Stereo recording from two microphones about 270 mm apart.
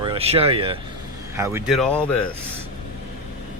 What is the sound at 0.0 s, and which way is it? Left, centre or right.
Speech, centre.